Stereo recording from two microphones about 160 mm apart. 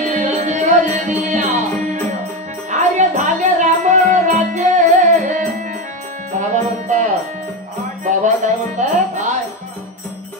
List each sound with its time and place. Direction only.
0.0 s music: 50° right (ahead or behind)
2.7 s music: 50° right (ahead or behind)
6.5 s music: 50° right (ahead or behind)